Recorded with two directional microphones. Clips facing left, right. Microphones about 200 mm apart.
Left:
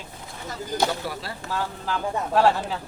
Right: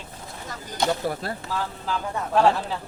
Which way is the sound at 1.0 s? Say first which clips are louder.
Right 5 dB; 50° right (ahead or behind).